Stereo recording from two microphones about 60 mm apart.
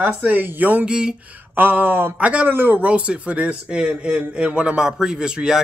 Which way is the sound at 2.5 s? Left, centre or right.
Right.